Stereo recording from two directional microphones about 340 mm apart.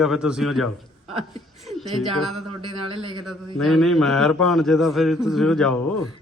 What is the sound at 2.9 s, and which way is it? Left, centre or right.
Speech, centre.